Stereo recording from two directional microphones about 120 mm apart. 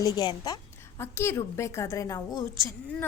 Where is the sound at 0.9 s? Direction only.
20° left (ahead or behind).